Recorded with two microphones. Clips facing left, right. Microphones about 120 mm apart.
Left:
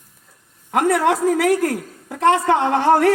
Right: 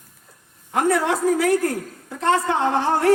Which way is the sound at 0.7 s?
80° left.